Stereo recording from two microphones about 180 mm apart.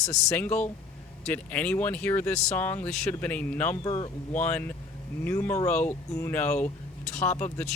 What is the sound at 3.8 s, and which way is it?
Speech, 25° left (ahead or behind).